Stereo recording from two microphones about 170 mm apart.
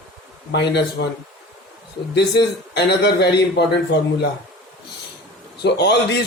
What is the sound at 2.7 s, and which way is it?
Speech, 80° left.